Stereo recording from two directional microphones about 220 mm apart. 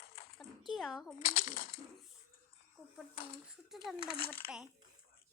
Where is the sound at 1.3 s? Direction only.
40° left (ahead or behind).